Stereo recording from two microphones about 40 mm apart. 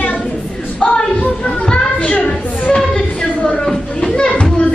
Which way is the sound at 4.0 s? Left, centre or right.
Left.